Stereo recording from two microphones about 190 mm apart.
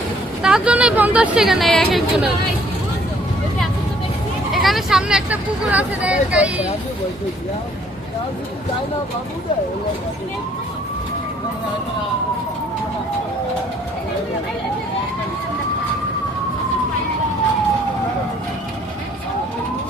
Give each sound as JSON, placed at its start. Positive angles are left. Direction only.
{"t": 0.4, "sound": "a woman's voice", "side_deg": -5}
{"t": 4.5, "sound": "a woman's voice", "side_deg": 0}